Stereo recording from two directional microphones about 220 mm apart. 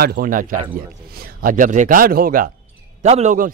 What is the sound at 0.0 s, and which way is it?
Speech, 40° right (ahead or behind).